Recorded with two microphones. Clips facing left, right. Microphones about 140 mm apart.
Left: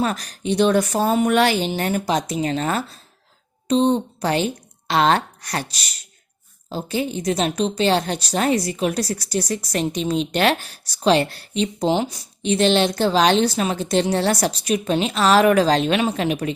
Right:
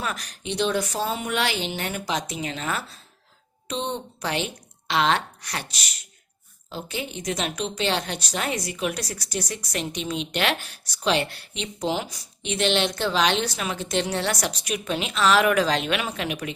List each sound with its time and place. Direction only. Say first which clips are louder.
0.0 s a woman's voice: left 8 dB; 35° left (ahead or behind)